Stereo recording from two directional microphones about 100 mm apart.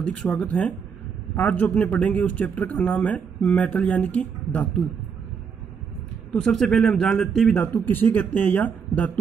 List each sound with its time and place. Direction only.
0.0 s speech: 10° left (ahead or behind)
6.4 s a man's voice: 5° left (ahead or behind)
7.6 s speech: 20° left (ahead or behind)